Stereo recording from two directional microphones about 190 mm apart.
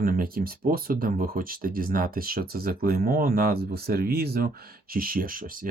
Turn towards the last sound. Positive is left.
turn(degrees=-45)  # may be behind; listen again after turning